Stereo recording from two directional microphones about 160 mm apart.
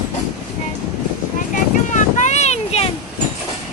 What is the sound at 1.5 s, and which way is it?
Vehicle, 50° left (ahead or behind).